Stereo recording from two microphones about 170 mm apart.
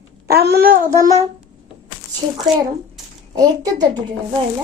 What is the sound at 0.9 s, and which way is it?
Child singing, 20° right (ahead or behind).